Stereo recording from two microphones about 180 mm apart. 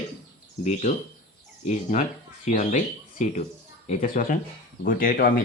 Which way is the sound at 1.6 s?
40° left (ahead or behind).